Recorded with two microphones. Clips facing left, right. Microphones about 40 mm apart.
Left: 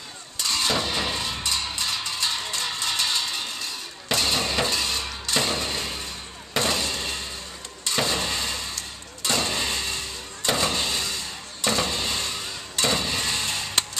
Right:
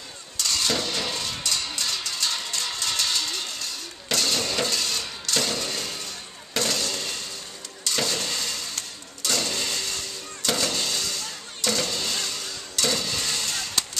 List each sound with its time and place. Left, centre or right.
0.4 s music: centre
6.5 s fireworks: left
7.8 s a sound: left
9.2 s vehicle: left